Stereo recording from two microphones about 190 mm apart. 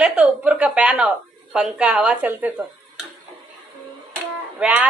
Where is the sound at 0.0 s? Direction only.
5° right (ahead or behind).